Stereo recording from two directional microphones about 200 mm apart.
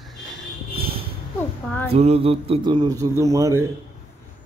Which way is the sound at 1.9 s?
30° right (ahead or behind).